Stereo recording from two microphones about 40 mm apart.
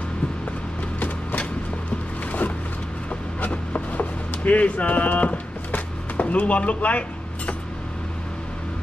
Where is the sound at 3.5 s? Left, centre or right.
Left.